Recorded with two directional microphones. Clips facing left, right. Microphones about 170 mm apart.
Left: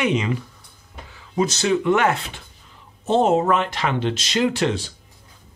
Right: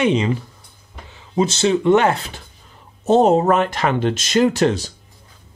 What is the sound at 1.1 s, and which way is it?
Speech, 25° right (ahead or behind).